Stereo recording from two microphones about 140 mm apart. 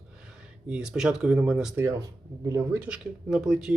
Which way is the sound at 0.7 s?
5° right (ahead or behind).